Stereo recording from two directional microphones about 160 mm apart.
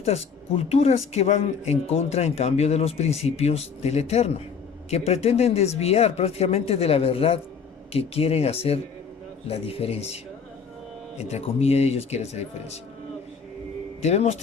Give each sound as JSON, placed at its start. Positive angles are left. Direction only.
{"t": 0.0, "sound": "speech", "side_deg": 40}
{"t": 11.3, "sound": "speech", "side_deg": 40}
{"t": 14.0, "sound": "a man's voice", "side_deg": 45}